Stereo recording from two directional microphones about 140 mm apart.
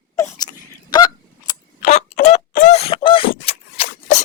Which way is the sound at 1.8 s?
60° left (ahead or behind).